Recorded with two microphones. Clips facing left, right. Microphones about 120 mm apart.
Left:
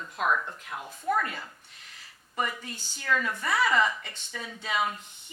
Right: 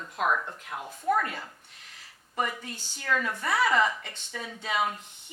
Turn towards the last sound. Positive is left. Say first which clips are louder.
# right 1 dB
turn(degrees=-45)  # may be behind; listen again after turning